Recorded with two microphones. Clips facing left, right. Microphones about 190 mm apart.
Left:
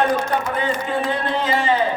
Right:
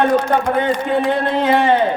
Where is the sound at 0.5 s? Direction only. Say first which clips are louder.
Right 5 dB; 60° right (ahead or behind).